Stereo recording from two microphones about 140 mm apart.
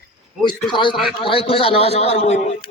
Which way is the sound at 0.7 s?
35° left (ahead or behind).